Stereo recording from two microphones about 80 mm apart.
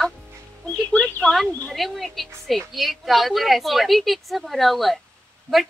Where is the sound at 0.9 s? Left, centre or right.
Left.